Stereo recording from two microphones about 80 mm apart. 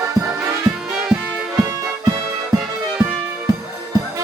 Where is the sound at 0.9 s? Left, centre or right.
Centre.